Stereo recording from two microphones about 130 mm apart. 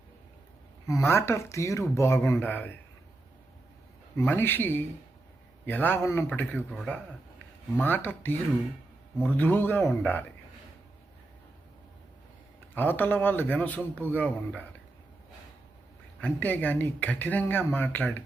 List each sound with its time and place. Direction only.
0.9 s speech: 20° left (ahead or behind)
4.2 s speech: 15° left (ahead or behind)
12.7 s speech: 15° left (ahead or behind)
16.2 s speech: 15° left (ahead or behind)